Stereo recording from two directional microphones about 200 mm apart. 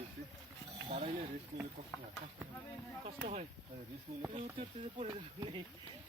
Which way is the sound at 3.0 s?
30° right (ahead or behind).